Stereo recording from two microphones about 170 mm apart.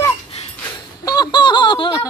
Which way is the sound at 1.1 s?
25° left (ahead or behind).